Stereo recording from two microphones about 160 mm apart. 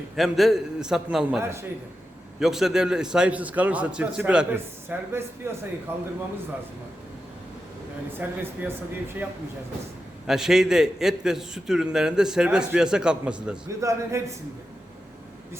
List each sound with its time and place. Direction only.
0.2 s a man's voice: centre (ahead or behind); by 1.6 s 15° right (ahead or behind)
2.4 s a man's voice: centre (ahead or behind)
8.2 s a man's voice: 15° right (ahead or behind)
10.2 s a man's voice: 5° right (ahead or behind)
13.7 s a man's voice: 20° right (ahead or behind)